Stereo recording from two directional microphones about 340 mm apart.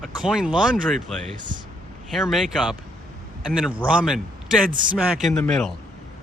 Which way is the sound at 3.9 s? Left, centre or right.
Centre.